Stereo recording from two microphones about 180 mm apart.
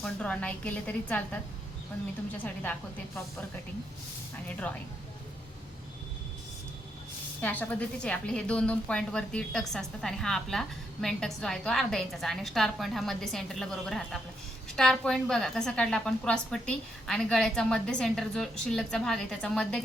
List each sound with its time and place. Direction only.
0.0 s a woman's voice: 5° left (ahead or behind)
4.4 s a woman's voice: 10° left (ahead or behind)
7.4 s a woman's voice: 10° left (ahead or behind)